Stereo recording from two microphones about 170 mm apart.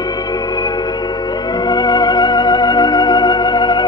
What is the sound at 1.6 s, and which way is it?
Music, 25° left (ahead or behind).